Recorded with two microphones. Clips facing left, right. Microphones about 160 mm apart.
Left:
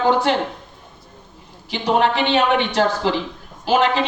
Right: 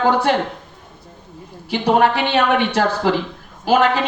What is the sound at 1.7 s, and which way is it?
A man's voice, 50° right (ahead or behind).